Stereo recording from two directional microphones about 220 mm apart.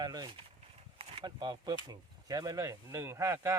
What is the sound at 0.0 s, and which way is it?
Speech, 20° right (ahead or behind).